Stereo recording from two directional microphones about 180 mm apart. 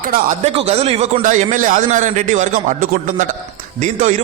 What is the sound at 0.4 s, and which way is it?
A man's voice, 35° right (ahead or behind).